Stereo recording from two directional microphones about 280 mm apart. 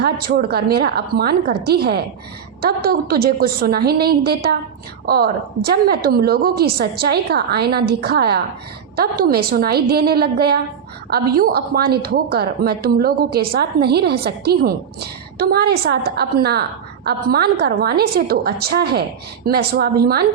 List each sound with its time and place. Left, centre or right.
0.0 s a woman's voice: right